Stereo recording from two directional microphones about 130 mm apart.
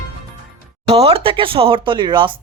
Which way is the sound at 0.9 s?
50° right (ahead or behind).